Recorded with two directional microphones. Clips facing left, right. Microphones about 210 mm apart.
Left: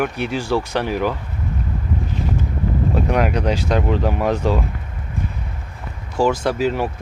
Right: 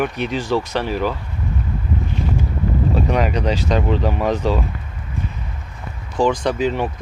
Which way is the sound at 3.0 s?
10° left (ahead or behind).